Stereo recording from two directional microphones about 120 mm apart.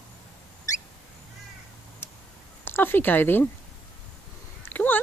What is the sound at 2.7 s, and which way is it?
Speech, 20° left (ahead or behind).